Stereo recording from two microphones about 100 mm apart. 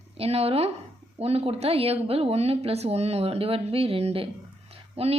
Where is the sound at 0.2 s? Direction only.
85° right.